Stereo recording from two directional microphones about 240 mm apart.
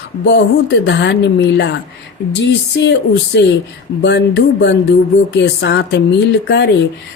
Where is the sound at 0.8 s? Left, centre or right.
Left.